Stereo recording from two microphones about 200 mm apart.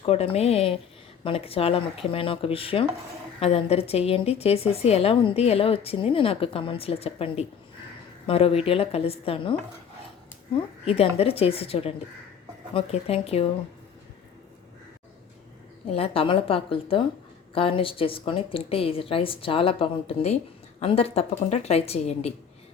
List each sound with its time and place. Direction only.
0.0 s a woman's voice: 30° left (ahead or behind)
10.8 s a woman's voice: 30° left (ahead or behind)
15.9 s a woman's voice: 30° left (ahead or behind)